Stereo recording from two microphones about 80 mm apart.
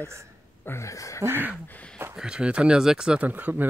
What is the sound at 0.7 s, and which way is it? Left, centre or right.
Speech, left.